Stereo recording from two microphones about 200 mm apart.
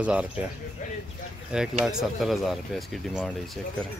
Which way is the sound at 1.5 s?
5° right (ahead or behind).